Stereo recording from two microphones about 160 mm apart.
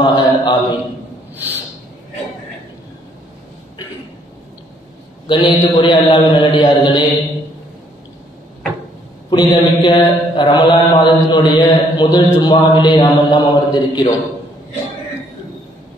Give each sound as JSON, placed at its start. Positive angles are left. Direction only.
{"t": 0.0, "sound": "mantra", "side_deg": 30}
{"t": 1.3, "sound": "a sound", "side_deg": -10}
{"t": 5.2, "sound": "mantra", "side_deg": 30}
{"t": 9.3, "sound": "mantra", "side_deg": 30}